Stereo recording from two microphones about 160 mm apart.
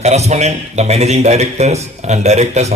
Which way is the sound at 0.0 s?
45° right (ahead or behind).